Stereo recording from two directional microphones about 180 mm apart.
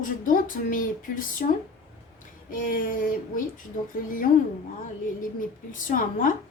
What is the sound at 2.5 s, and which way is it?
Speech, 50° left (ahead or behind).